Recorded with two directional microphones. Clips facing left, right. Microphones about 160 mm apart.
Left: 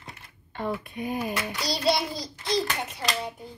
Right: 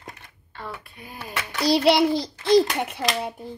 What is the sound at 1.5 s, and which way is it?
A child's voice, 70° right (ahead or behind).